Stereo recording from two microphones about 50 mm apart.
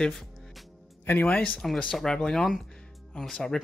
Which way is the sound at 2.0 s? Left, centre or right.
Centre.